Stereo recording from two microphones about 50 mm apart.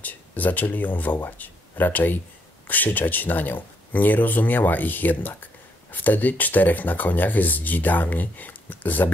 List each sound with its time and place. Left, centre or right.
0.0 s speech: left